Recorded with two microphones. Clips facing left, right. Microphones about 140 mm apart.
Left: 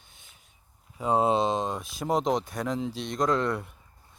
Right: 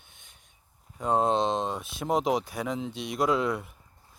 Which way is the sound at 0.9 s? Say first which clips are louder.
Left 1 dB; 5° left (ahead or behind).